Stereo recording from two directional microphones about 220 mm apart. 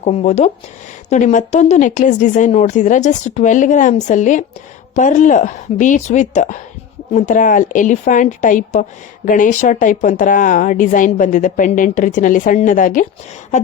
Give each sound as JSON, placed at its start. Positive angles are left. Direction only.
{"t": 0.0, "sound": "a woman's voice", "side_deg": 30}